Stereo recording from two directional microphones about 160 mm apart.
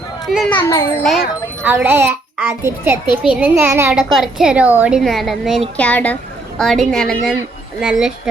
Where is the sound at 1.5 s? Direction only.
15° right (ahead or behind).